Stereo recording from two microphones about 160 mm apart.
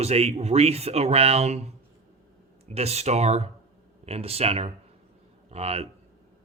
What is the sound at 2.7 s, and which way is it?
A man's voice, 40° right (ahead or behind).